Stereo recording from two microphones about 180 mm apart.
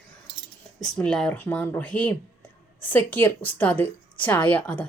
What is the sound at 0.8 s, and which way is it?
A woman's voice, 5° left (ahead or behind).